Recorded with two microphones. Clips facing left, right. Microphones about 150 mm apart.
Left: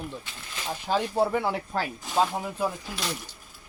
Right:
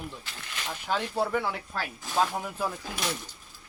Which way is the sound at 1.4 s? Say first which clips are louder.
Left 4 dB; 30° left (ahead or behind).